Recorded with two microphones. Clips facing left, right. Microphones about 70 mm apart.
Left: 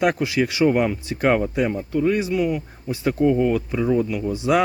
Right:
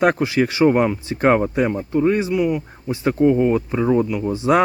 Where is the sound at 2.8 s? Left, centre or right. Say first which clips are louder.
Right 3 dB; right.